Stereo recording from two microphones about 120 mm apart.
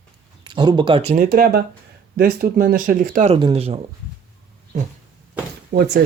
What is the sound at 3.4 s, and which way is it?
Speech, 50° right (ahead or behind).